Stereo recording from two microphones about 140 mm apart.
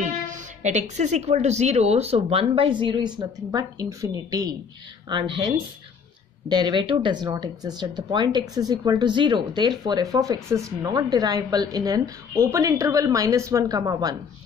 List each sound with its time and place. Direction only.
0.0 s a woman's voice: 60° right (ahead or behind); by 5.5 s 35° right (ahead or behind)
6.5 s speech: 35° right (ahead or behind)